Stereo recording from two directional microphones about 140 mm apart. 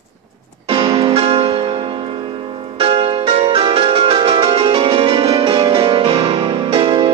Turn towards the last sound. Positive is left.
turn(degrees=-40)  # may be behind; listen again after turning